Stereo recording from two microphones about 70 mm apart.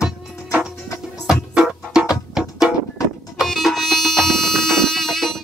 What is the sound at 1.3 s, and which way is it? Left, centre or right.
Music, centre.